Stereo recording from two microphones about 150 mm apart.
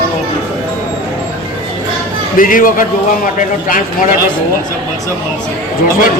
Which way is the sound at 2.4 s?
65° left (ahead or behind).